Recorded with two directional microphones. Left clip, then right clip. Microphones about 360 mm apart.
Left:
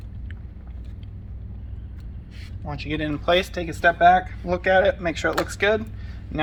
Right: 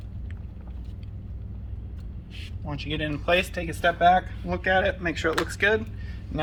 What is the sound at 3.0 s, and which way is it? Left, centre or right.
Speech, centre.